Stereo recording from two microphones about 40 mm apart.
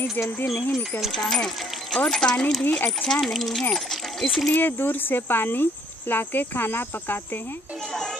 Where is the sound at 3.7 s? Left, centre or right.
Centre.